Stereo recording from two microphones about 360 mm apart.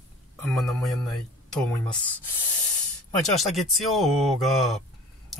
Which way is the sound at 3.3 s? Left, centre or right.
Centre.